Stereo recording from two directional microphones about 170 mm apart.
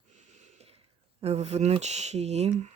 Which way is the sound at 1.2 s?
40° right (ahead or behind).